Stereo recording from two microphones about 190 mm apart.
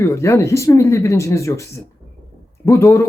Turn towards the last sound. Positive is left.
turn(degrees=15)  # may be behind; listen again after turning